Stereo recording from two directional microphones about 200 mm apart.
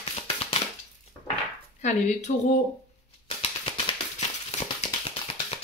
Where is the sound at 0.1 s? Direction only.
30° left (ahead or behind).